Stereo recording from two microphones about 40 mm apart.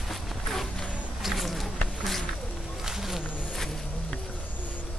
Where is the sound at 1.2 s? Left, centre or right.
Centre.